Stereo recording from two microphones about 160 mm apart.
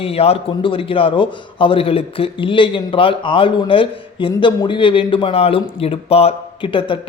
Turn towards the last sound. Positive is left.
turn(degrees=30)  # may be behind; listen again after turning